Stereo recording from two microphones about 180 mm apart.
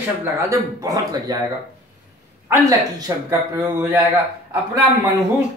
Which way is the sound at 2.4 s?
20° right (ahead or behind).